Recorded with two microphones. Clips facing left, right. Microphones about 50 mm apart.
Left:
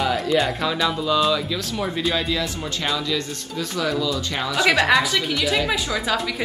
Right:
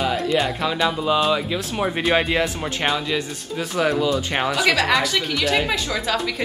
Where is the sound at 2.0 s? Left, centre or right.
Right.